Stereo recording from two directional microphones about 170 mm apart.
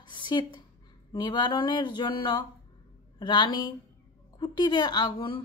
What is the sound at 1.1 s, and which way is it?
A woman's voice, 25° left (ahead or behind).